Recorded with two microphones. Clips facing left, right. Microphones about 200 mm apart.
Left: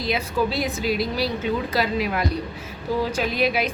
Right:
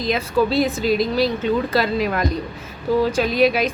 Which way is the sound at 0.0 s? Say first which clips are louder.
Right 4 dB; 10° left (ahead or behind).